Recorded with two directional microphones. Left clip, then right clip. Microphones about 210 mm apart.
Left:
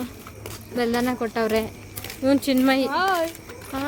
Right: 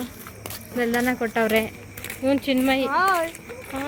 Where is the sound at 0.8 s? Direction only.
15° left (ahead or behind).